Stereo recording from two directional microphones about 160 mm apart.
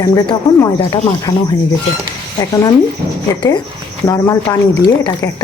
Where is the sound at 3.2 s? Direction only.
25° left (ahead or behind).